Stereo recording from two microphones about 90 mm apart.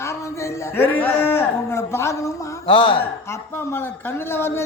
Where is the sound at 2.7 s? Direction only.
75° left (ahead or behind).